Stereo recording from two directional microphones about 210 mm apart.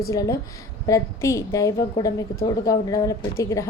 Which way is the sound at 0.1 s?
15° left (ahead or behind).